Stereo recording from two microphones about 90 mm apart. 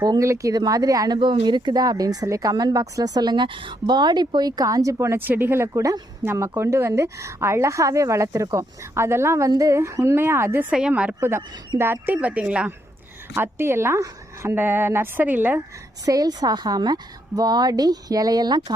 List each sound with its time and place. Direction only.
0.2 s a woman's voice: 35° right (ahead or behind)
1.2 s a woman's voice: 60° right (ahead or behind); by 10.7 s 25° right (ahead or behind)
10.7 s speech: 10° right (ahead or behind)
11.2 s a woman's voice: 30° right (ahead or behind)
13.3 s a woman's voice: 25° right (ahead or behind)
16.0 s speech: 45° right (ahead or behind)